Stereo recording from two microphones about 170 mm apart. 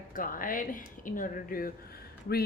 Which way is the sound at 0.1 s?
55° left (ahead or behind).